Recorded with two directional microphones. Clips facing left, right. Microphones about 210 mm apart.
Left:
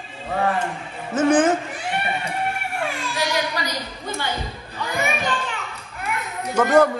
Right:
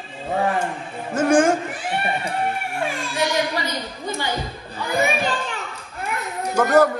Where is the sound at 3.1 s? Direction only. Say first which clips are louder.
Right 3 dB; 25° right (ahead or behind).